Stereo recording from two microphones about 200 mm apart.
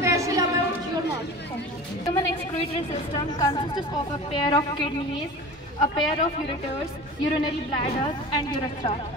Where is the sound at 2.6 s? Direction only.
25° left (ahead or behind).